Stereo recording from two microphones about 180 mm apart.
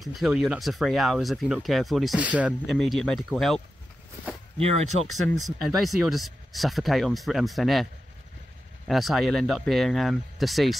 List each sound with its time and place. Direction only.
0.0 s speech: centre (ahead or behind)
4.6 s speech: 35° right (ahead or behind)
5.1 s speech: centre (ahead or behind)